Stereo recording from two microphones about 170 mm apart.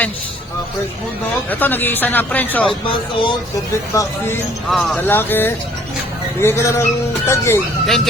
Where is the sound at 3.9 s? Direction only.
15° left (ahead or behind).